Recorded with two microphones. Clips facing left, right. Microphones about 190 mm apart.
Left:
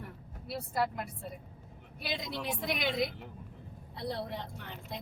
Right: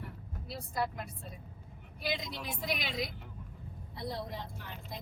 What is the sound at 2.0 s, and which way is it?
Speech, 60° left (ahead or behind).